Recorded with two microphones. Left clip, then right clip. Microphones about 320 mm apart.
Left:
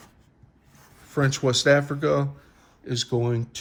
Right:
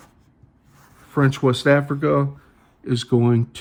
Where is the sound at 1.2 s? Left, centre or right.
Centre.